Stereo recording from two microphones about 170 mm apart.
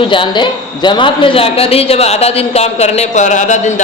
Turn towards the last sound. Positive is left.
turn(degrees=45)  # may be behind; listen again after turning